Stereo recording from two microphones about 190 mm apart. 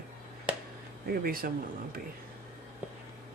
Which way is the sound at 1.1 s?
50° right (ahead or behind).